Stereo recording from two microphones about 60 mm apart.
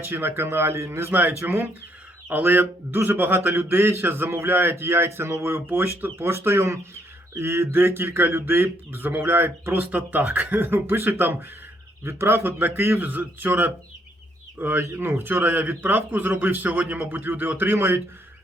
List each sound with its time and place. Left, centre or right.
0.0 s a man's voice: right
2.3 s a man's voice: right
3.5 s a man's voice: right
8.9 s a man's voice: right
9.9 s a man's voice: right